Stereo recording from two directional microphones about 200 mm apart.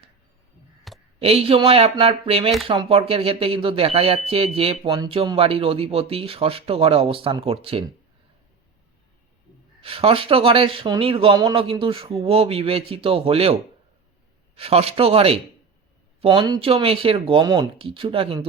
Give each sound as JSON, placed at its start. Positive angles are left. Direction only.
{"t": 0.9, "sound": "a sound", "side_deg": 0}
{"t": 1.2, "sound": "speech", "side_deg": -30}
{"t": 9.8, "sound": "speech", "side_deg": -25}